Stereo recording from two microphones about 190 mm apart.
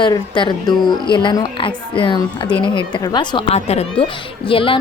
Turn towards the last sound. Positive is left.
turn(degrees=25)  # may be behind; listen again after turning